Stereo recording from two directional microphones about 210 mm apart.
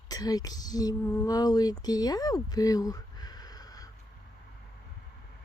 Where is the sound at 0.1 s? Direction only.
20° left (ahead or behind).